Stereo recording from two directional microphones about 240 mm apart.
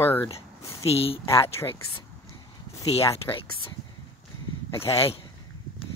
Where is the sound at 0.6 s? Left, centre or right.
Centre.